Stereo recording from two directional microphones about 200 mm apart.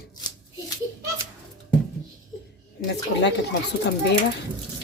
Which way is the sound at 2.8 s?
60° left (ahead or behind).